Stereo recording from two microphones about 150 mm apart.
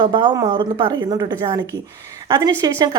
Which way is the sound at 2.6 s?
25° right (ahead or behind).